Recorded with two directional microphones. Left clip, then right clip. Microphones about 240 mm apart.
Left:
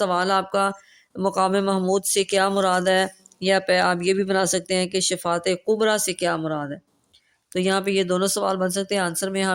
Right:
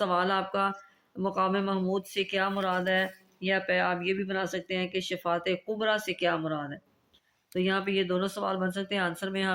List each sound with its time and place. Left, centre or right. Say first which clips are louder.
0.0 s speech: left 6 dB; left